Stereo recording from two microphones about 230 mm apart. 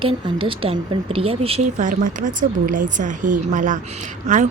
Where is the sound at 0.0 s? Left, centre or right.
Right.